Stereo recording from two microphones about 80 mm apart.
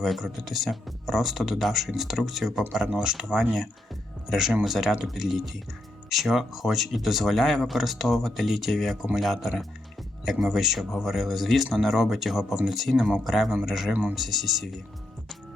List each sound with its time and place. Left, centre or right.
0.0 s speech: centre
13.9 s speech: centre
14.2 s speech: centre